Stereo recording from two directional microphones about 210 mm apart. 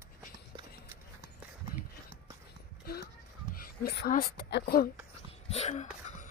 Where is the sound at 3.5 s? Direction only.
45° left (ahead or behind).